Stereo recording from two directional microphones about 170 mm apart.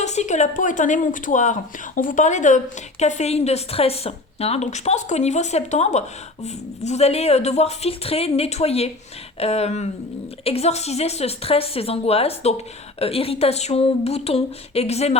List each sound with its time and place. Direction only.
0.0 s a woman's voice: 40° left (ahead or behind)